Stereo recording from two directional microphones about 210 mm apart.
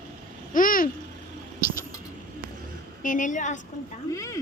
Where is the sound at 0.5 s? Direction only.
40° left (ahead or behind).